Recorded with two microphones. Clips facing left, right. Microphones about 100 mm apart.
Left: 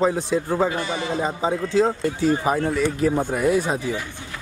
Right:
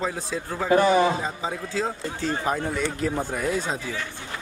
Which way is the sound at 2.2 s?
10° left (ahead or behind).